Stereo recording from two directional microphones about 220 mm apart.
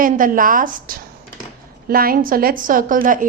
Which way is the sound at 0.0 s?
40° right (ahead or behind).